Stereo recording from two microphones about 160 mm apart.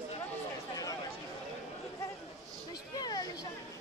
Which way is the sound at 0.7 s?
20° left (ahead or behind).